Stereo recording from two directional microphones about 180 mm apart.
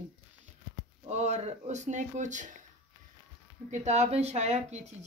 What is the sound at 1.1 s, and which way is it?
Speech, 40° right (ahead or behind).